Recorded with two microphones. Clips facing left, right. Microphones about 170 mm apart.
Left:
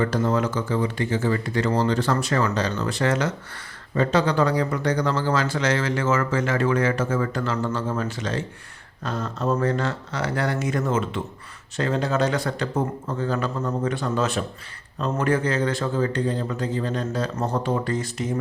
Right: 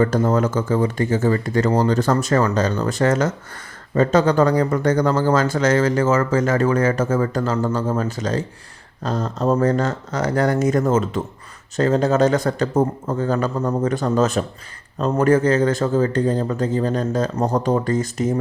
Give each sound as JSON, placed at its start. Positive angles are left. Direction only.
{"t": 0.0, "sound": "speech", "side_deg": -45}